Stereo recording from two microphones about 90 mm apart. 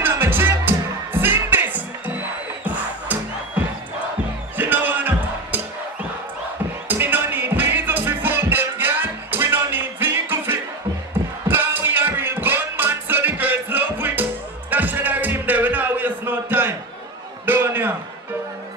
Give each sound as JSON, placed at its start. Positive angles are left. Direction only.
{"t": 0.0, "sound": "music", "side_deg": -20}
{"t": 6.9, "sound": "music", "side_deg": -20}
{"t": 17.5, "sound": "a sound", "side_deg": -25}